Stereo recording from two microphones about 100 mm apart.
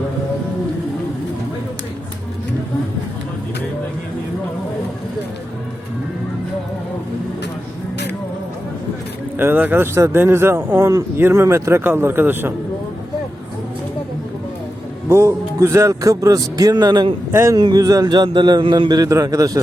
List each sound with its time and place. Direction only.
9.4 s speech: 20° right (ahead or behind)
15.1 s a man's voice: 30° right (ahead or behind); by 17.1 s 45° right (ahead or behind)
17.5 s music: 40° right (ahead or behind)
18.6 s a man's voice: 55° right (ahead or behind); by 19.6 s 35° right (ahead or behind)